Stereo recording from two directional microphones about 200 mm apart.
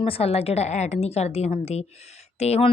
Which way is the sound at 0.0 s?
30° left (ahead or behind).